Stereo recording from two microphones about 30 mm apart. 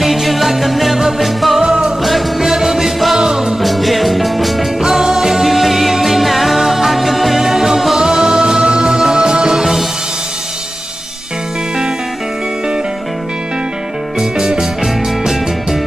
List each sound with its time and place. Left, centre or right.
0.0 s music: centre
1.6 s music: centre
3.6 s music: centre
4.8 s music: centre
8.0 s music: right